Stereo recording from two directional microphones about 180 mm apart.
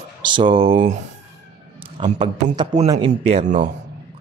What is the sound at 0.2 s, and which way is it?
Speech, 25° right (ahead or behind).